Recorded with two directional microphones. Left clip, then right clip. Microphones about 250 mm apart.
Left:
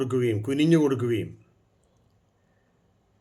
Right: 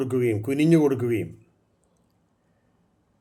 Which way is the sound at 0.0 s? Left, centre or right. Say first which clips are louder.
Right 1 dB; centre.